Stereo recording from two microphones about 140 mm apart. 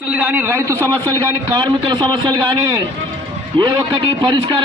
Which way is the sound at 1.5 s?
35° right (ahead or behind).